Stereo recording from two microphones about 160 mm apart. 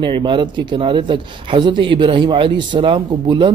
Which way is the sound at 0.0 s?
30° right (ahead or behind).